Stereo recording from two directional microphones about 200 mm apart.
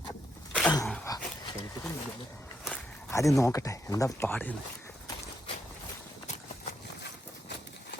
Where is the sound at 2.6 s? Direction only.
15° left (ahead or behind).